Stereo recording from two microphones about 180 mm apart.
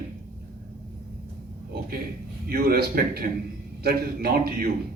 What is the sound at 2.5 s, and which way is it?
Speech, 55° right (ahead or behind).